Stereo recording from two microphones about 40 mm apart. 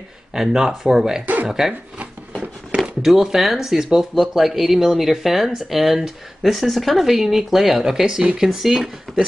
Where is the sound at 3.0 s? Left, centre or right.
Centre.